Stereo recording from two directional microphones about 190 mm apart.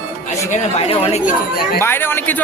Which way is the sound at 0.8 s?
30° left (ahead or behind).